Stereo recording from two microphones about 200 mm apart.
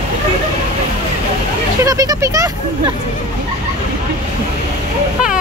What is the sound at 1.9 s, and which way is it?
Speech, 15° right (ahead or behind).